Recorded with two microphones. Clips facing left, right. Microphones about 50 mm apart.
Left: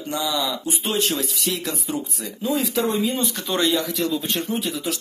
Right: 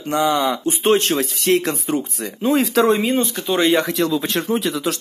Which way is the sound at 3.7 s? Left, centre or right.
Right.